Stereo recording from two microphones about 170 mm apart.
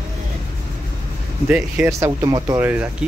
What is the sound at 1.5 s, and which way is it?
Speech, 15° right (ahead or behind).